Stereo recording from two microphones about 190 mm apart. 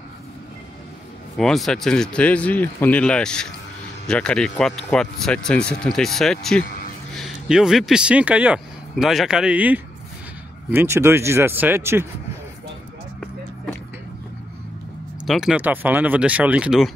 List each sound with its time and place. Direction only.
1.4 s speech: centre (ahead or behind)
15.2 s speech: centre (ahead or behind)